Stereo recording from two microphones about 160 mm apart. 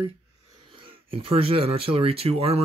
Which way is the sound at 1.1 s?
35° right (ahead or behind).